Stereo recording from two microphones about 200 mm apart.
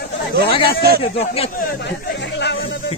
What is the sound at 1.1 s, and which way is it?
Speech, 30° left (ahead or behind).